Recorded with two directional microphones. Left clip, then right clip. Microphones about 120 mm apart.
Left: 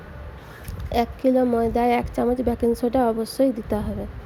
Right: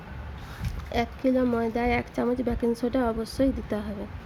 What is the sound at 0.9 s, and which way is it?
Speech, 25° left (ahead or behind).